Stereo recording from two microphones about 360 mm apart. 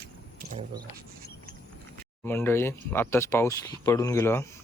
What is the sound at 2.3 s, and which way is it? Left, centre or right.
Speech, centre.